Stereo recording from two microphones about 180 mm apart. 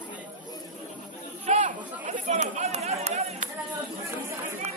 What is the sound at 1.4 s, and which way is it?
Chatter, 40° right (ahead or behind).